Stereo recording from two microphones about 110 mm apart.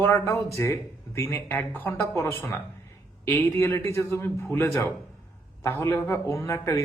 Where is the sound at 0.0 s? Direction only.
20° left (ahead or behind).